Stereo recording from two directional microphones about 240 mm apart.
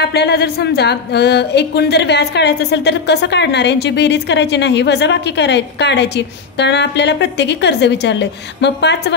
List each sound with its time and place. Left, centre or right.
0.0 s speech: left